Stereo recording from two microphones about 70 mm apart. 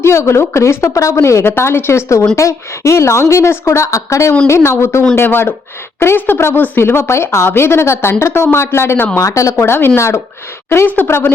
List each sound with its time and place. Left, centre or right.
0.0 s a woman's voice: left
9.1 s a woman's voice: left